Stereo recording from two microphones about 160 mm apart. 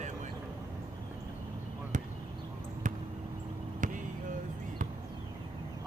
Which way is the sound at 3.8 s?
55° right (ahead or behind).